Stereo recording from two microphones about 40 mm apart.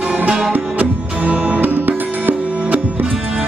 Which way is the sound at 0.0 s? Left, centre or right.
Right.